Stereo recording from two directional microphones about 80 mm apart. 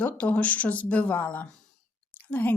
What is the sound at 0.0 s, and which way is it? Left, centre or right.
A woman's voice, centre.